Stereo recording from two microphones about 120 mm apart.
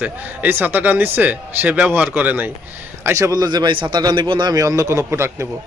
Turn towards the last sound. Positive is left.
turn(degrees=-20)  # may be behind; listen again after turning